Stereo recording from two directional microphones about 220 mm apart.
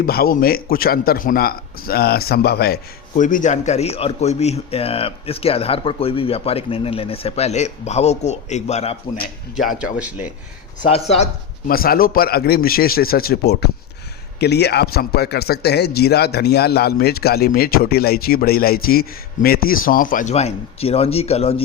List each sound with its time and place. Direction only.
0.0 s a man's voice: 45° left (ahead or behind)
9.6 s speech: 5° right (ahead or behind)
10.8 s a man's voice: 25° left (ahead or behind)
11.7 s a man's voice: 40° left (ahead or behind)